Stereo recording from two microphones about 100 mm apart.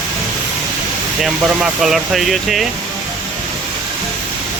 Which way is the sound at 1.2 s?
5° right (ahead or behind).